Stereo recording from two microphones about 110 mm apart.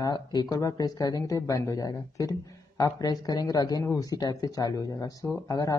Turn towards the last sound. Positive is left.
turn(degrees=30)  # may be behind; listen again after turning